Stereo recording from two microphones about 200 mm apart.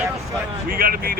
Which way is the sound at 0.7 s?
45° right (ahead or behind).